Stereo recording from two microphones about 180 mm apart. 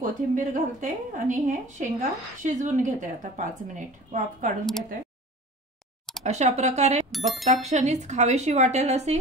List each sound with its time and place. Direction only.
0.0 s a woman's voice: 45° right (ahead or behind)
6.2 s speech: 40° right (ahead or behind)
7.1 s speech: centre (ahead or behind)
7.4 s speech: 40° right (ahead or behind)